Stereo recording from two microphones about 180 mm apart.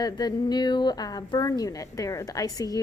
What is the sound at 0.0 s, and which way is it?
A woman's voice, 20° left (ahead or behind).